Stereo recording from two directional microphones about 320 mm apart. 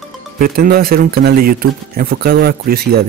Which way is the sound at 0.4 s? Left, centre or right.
Right.